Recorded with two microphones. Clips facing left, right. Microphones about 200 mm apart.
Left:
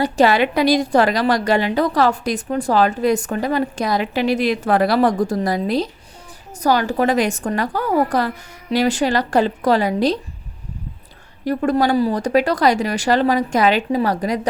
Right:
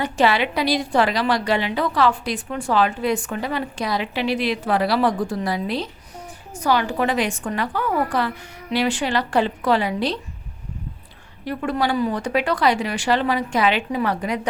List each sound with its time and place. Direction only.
0.0 s a woman's voice: 40° left (ahead or behind)
11.4 s a woman's voice: 40° left (ahead or behind)